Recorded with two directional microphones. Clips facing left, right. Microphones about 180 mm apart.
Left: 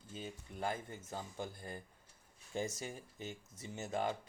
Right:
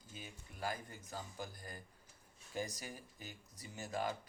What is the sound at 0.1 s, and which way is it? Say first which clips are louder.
Speech: left 7 dB; 25° left (ahead or behind).